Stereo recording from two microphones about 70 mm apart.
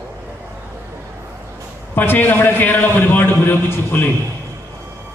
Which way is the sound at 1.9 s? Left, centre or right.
Left.